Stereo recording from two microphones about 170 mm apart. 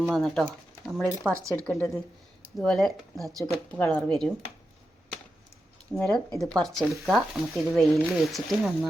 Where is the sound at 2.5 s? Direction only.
Centre (ahead or behind).